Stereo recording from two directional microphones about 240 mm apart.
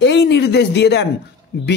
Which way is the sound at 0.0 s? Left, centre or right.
Left.